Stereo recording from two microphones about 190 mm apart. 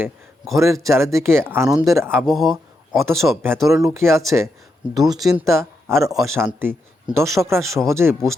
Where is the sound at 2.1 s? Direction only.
Centre (ahead or behind).